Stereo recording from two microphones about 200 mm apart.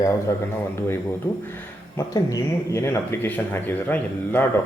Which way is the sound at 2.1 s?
15° left (ahead or behind).